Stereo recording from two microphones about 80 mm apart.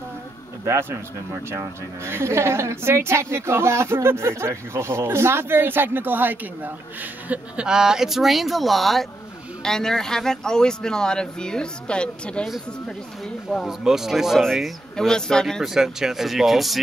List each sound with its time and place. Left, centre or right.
0.7 s a woman's voice: right; by 12.4 s centre
13.7 s speech: centre
15.6 s speech: centre